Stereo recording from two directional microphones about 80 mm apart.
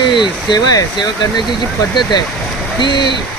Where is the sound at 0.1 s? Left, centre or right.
Left.